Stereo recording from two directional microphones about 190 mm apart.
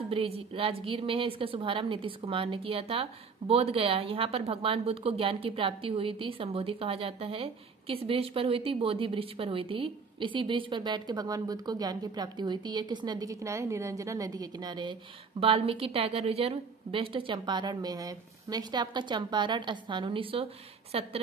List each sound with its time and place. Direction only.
0.1 s a woman's voice: 30° right (ahead or behind)